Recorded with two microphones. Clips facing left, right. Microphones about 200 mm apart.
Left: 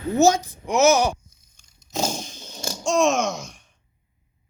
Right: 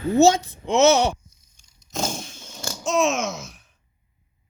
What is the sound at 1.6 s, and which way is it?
Chainsaw, 55° left (ahead or behind).